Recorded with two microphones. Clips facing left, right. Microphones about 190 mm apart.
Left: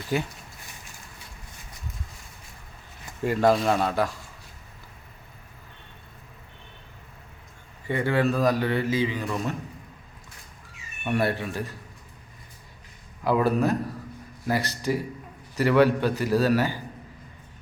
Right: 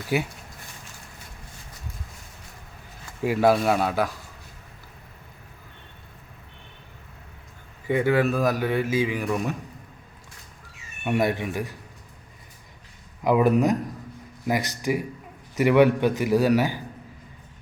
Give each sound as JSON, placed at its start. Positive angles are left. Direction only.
{"t": 0.1, "sound": "a man's voice", "side_deg": -10}
{"t": 3.2, "sound": "a man's voice", "side_deg": -5}
{"t": 7.9, "sound": "a man's voice", "side_deg": -10}
{"t": 11.0, "sound": "a man's voice", "side_deg": -15}
{"t": 13.2, "sound": "a man's voice", "side_deg": -20}